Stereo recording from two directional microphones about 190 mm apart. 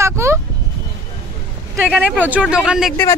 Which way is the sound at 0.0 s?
15° right (ahead or behind).